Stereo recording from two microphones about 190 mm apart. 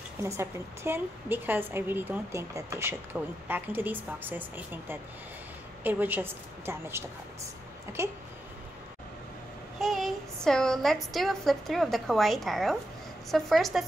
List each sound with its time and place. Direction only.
0.2 s a woman's voice: 15° right (ahead or behind)
9.8 s a woman's voice: centre (ahead or behind)